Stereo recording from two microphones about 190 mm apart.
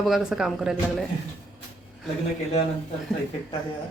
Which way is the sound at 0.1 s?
5° right (ahead or behind).